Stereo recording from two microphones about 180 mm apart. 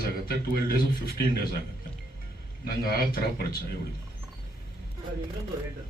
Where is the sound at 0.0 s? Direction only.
55° left (ahead or behind).